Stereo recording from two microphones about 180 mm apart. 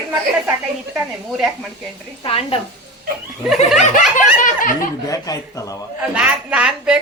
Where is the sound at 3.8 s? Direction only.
40° left (ahead or behind).